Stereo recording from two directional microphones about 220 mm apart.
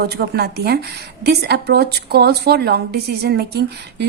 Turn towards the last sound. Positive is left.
turn(degrees=-50)  # may be behind; listen again after turning